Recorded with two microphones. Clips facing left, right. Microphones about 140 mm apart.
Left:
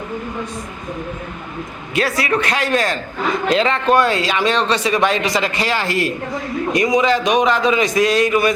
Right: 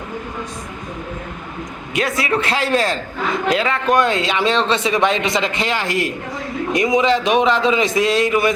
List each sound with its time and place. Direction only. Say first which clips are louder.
2.0 s speech: left 1 dB; 20° right (ahead or behind)
3.5 s a man's voice: left 3 dB; 10° right (ahead or behind)
3.9 s speech: even; 20° right (ahead or behind)